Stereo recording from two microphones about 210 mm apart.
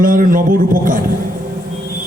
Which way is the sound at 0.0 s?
40° right (ahead or behind).